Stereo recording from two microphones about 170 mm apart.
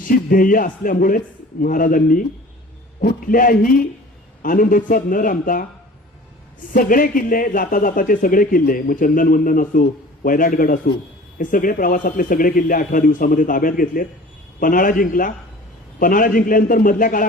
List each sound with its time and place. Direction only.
0.1 s a man's voice: 55° left (ahead or behind)
6.7 s a man's voice: 55° left (ahead or behind)